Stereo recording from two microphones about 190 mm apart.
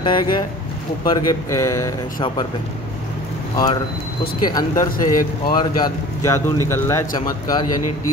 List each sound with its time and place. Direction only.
0.0 s speech: 25° left (ahead or behind)
3.5 s speech: 20° left (ahead or behind)